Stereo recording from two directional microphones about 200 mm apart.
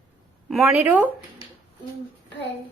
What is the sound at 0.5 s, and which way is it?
Speech, 5° right (ahead or behind).